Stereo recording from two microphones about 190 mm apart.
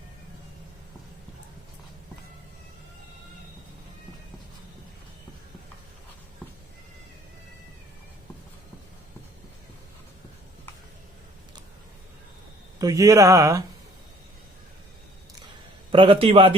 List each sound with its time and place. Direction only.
12.8 s speech: 15° right (ahead or behind)
15.9 s a man's voice: 30° right (ahead or behind)